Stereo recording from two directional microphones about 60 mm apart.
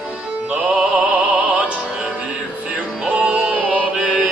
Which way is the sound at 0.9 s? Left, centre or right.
Centre.